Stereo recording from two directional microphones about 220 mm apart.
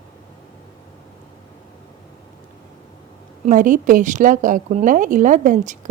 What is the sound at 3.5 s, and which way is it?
A woman's voice, 35° right (ahead or behind).